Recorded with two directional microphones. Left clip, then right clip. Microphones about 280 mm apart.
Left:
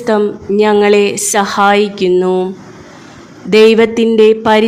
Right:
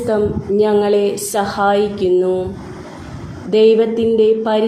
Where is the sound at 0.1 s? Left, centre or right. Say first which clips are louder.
Left 5 dB; left.